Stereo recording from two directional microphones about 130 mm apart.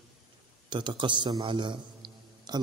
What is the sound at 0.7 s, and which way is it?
A man's voice, 35° right (ahead or behind).